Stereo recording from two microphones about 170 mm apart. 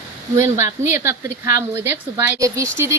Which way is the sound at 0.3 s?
15° right (ahead or behind).